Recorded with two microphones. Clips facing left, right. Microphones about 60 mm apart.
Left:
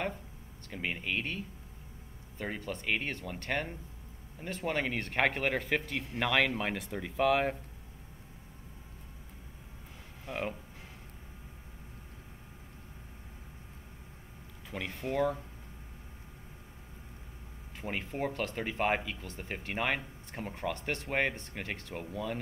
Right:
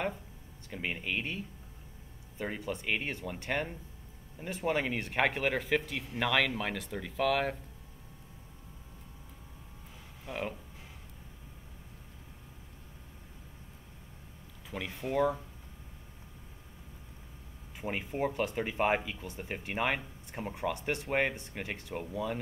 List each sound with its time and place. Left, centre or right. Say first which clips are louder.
0.7 s speech: even; centre
10.2 s speech: left 1 dB; centre
14.7 s speech: right 1 dB; centre
17.8 s speech: right 2 dB; centre
18.3 s speech: right 3 dB; centre
18.6 s speech: right 1 dB; centre